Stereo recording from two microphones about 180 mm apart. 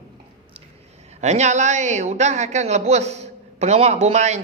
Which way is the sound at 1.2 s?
40° right (ahead or behind).